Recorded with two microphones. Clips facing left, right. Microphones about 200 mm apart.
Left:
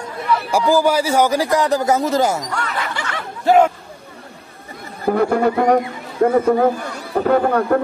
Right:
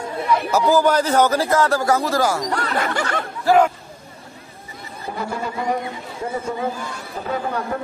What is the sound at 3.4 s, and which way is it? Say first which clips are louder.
Speech: left 2 dB; 25° left (ahead or behind).